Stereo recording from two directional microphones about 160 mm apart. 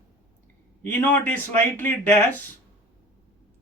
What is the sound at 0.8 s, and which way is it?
Speech, 10° left (ahead or behind).